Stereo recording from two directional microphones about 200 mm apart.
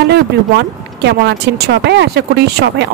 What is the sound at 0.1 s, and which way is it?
Speech, 55° right (ahead or behind).